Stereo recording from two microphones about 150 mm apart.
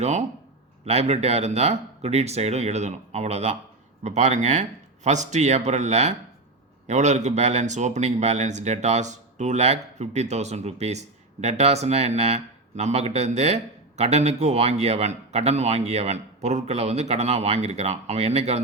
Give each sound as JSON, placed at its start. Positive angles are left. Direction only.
{"t": 0.9, "sound": "speech", "side_deg": -45}